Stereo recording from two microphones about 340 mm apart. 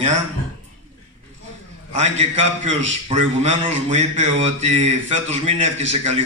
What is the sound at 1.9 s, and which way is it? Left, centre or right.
A man's voice, centre.